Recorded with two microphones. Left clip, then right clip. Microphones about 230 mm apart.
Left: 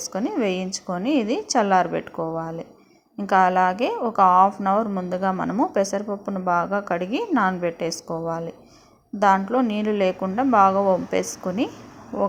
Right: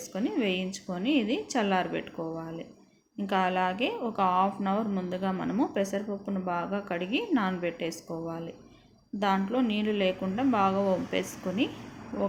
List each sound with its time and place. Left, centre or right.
0.1 s a woman's voice: left